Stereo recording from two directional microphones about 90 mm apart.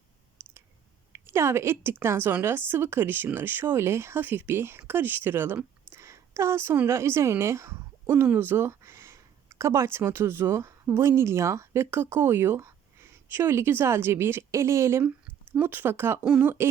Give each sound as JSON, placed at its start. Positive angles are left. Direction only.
{"t": 0.4, "sound": "clicking", "side_deg": -25}
{"t": 1.1, "sound": "a woman's voice", "side_deg": -30}
{"t": 16.2, "sound": "speech", "side_deg": -10}